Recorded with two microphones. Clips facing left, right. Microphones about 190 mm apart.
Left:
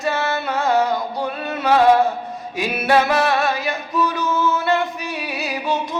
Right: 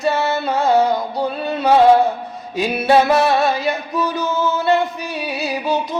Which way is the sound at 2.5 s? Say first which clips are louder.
Right 3 dB; 30° right (ahead or behind).